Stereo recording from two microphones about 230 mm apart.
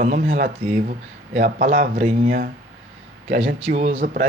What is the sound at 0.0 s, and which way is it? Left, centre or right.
Speech, right.